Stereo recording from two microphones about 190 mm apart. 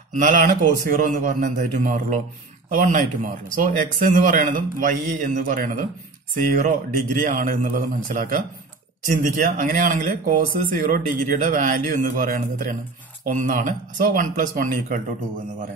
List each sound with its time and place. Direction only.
0.1 s speech: 40° right (ahead or behind)
7.2 s speech: 45° right (ahead or behind)